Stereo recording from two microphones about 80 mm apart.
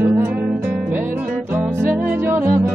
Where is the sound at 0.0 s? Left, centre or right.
Right.